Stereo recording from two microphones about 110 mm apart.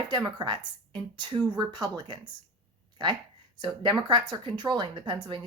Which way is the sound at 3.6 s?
40° right (ahead or behind).